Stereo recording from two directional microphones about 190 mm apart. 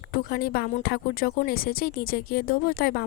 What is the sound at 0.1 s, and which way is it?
Speech, 50° left (ahead or behind).